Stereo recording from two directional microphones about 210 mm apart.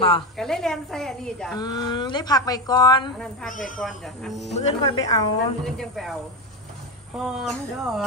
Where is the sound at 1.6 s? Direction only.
20° left (ahead or behind).